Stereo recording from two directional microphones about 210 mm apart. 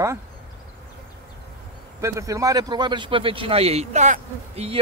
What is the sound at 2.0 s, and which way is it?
A man's voice, 15° right (ahead or behind).